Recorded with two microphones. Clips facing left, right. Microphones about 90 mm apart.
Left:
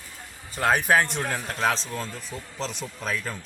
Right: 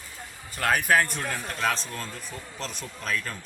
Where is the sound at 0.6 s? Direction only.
25° left (ahead or behind).